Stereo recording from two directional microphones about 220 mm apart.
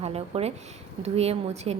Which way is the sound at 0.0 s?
30° right (ahead or behind).